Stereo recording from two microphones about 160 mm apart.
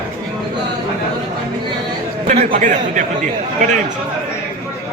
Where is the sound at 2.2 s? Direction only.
50° right (ahead or behind).